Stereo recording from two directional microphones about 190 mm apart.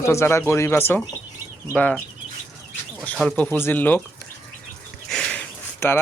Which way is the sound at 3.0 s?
5° left (ahead or behind).